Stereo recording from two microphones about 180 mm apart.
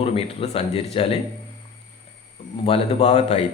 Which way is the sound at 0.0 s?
30° left (ahead or behind).